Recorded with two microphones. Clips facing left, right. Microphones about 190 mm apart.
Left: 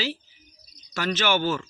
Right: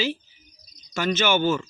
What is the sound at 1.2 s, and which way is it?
Speech, centre (ahead or behind).